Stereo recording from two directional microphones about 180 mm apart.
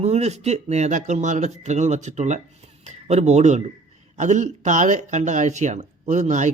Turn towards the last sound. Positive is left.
turn(degrees=-40)  # may be behind; listen again after turning